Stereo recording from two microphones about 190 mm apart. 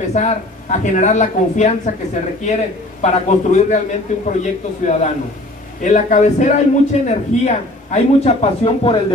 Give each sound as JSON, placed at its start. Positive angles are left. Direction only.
{"t": 0.1, "sound": "a man's voice", "side_deg": 40}